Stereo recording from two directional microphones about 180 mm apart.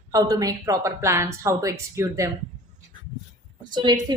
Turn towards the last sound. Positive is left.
turn(degrees=-25)  # may be behind; listen again after turning